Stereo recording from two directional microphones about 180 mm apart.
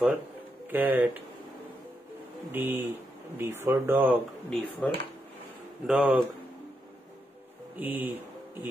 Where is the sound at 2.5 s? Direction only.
10° right (ahead or behind).